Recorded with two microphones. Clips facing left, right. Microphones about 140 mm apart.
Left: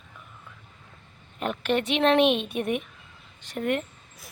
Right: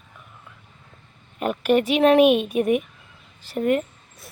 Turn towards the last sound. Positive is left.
turn(degrees=-5)  # may be behind; listen again after turning